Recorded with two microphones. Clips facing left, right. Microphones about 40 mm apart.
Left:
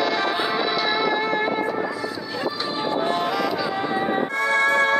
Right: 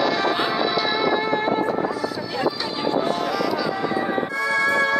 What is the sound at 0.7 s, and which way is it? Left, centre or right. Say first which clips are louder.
Music: right 1 dB; left.